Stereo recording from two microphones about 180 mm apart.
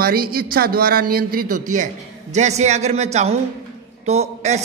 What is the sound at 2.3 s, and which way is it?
A man's voice, 40° right (ahead or behind).